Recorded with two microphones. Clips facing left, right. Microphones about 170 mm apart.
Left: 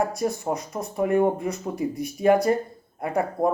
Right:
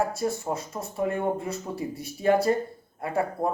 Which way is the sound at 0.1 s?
15° left (ahead or behind).